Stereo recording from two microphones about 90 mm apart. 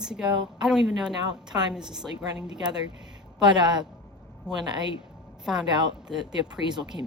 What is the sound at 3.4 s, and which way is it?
Speech, 55° right (ahead or behind).